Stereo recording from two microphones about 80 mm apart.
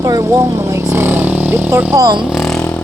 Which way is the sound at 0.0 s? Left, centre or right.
Right.